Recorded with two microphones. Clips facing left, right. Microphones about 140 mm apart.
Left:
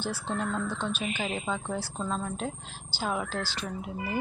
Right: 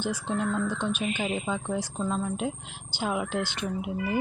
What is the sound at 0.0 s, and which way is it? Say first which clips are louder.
Speech: right 3 dB; 15° right (ahead or behind).